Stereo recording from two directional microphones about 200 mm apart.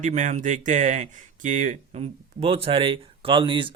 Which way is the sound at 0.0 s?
35° right (ahead or behind).